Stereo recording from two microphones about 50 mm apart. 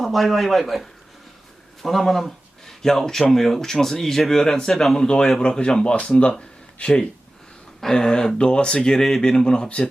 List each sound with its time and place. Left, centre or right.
0.0 s speech: centre
4.9 s speech: centre